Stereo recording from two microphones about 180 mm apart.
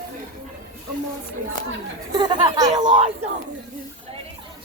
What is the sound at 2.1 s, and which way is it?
Speech, 25° right (ahead or behind).